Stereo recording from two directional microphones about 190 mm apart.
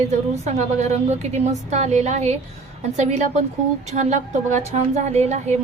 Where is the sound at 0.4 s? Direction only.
35° right (ahead or behind).